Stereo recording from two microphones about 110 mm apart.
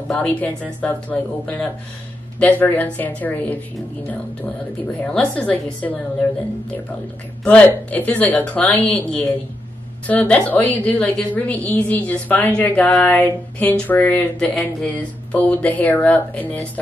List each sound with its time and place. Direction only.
0.1 s speech: 10° left (ahead or behind)
5.0 s speech: 10° left (ahead or behind)
7.4 s speech: 15° left (ahead or behind)